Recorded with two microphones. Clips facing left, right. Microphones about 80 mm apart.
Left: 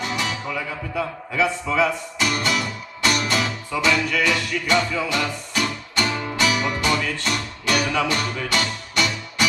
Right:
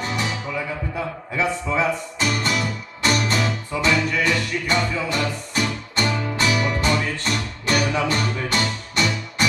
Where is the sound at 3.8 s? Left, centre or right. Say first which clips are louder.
Even; right.